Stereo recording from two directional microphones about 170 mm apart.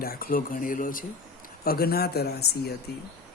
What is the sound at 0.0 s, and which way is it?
Speech, 60° left (ahead or behind).